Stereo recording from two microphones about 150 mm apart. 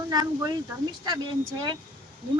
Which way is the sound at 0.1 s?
25° right (ahead or behind).